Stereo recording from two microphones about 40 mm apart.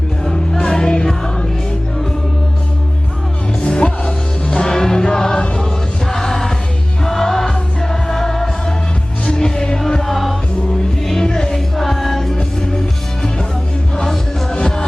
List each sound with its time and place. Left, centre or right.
0.6 s music: left
3.6 s music: left; by 12.4 s centre
13.9 s music: centre